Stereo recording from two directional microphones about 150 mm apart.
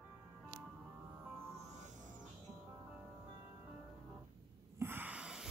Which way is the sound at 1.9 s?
60° right (ahead or behind).